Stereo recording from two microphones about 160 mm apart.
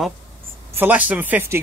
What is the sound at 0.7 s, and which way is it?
Speech, 10° right (ahead or behind).